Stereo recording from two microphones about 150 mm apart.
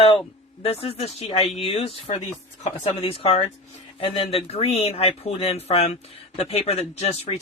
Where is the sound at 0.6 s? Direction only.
40° left (ahead or behind).